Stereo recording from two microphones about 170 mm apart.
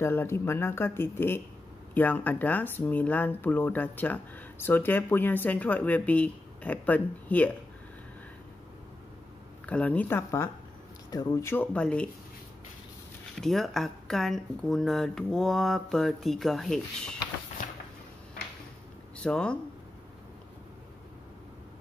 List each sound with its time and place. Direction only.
0.0 s speech: 15° left (ahead or behind)
9.7 s speech: 10° left (ahead or behind)
13.4 s speech: centre (ahead or behind)
17.6 s a sound: 50° left (ahead or behind)
19.2 s speech: 5° left (ahead or behind)